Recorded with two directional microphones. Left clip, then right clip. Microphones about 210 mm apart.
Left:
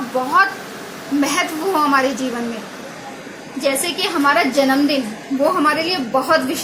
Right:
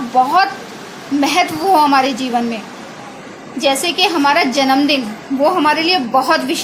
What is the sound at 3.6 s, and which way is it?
A woman's voice, 25° right (ahead or behind).